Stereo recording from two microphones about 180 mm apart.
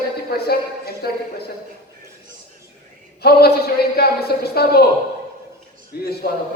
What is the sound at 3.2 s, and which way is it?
Speech, 60° left (ahead or behind).